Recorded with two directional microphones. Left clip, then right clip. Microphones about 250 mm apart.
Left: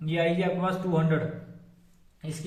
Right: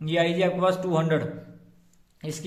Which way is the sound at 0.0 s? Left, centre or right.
Right.